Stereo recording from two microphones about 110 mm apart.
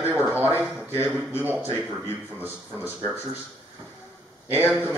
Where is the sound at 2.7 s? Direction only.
10° right (ahead or behind).